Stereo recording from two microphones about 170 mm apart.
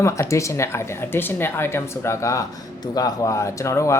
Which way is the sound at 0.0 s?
15° left (ahead or behind).